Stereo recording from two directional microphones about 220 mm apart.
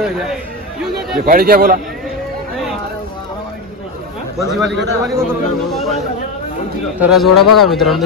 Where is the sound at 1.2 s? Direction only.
40° right (ahead or behind).